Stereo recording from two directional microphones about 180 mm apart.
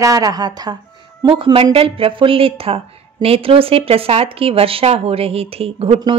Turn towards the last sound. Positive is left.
turn(degrees=-30)  # may be behind; listen again after turning